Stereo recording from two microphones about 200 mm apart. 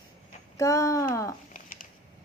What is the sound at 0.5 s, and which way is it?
Speech, 15° left (ahead or behind).